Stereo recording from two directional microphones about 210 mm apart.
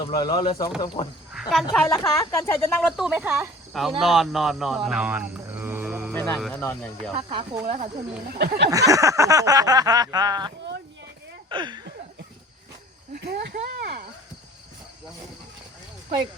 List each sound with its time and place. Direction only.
0.0 s speech: 20° left (ahead or behind)
1.3 s speech: centre (ahead or behind)
2.0 s speech: 15° left (ahead or behind)
2.8 s a sound: centre (ahead or behind)
3.7 s speech: centre (ahead or behind)
6.1 s music: 10° left (ahead or behind)
6.4 s speech: 10° left (ahead or behind)
7.3 s speech: 25° right (ahead or behind)
8.3 s a sound: 50° right (ahead or behind)
8.7 s a sound: 15° right (ahead or behind)
11.4 s speech: 20° right (ahead or behind)
13.1 s speech: 50° right (ahead or behind)